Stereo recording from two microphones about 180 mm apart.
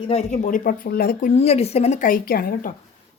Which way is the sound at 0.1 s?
45° left (ahead or behind).